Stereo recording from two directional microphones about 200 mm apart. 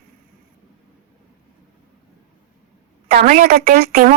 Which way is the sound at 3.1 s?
45° right (ahead or behind).